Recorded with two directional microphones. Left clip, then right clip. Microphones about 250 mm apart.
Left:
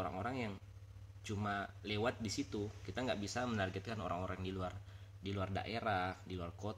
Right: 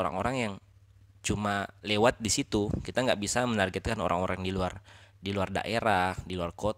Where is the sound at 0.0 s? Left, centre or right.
Right.